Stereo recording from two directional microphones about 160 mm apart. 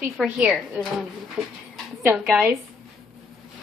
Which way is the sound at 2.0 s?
10° right (ahead or behind).